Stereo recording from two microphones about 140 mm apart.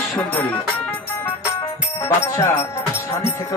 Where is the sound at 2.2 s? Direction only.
20° left (ahead or behind).